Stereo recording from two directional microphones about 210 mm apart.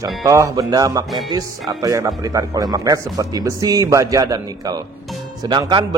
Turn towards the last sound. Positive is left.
turn(degrees=-20)  # may be behind; listen again after turning